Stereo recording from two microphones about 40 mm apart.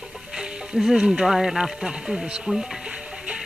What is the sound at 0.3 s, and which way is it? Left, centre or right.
Speech, centre.